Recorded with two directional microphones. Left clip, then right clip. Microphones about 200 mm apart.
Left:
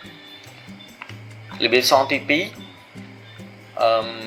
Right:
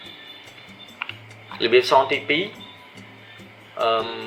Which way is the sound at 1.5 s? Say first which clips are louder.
Even; 45° left (ahead or behind).